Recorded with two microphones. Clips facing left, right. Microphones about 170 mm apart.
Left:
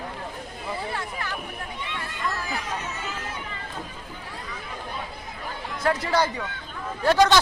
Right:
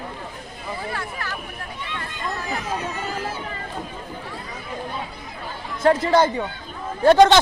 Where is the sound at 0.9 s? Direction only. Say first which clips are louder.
Right 1 dB; 20° left (ahead or behind).